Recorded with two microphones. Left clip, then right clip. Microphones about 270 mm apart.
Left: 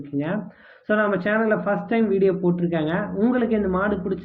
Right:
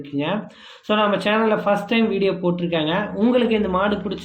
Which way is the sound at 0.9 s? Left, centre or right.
Centre.